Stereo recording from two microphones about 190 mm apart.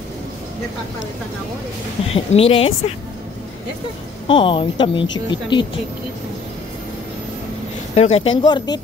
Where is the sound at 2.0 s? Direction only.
30° left (ahead or behind).